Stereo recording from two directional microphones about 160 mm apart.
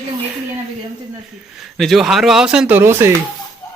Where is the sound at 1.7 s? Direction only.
Centre (ahead or behind).